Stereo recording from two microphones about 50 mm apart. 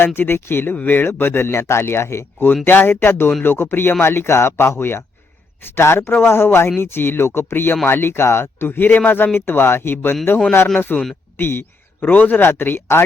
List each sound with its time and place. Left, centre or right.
0.0 s a man's voice: left
2.6 s a man's voice: left
8.6 s a man's voice: left